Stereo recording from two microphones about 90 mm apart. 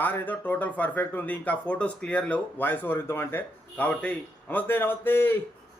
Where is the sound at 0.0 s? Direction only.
20° left (ahead or behind).